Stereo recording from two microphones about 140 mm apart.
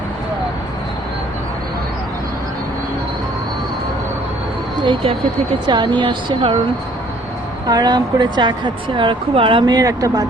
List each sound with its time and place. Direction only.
4.8 s a woman's voice: 35° right (ahead or behind)
7.7 s a woman's voice: 30° right (ahead or behind)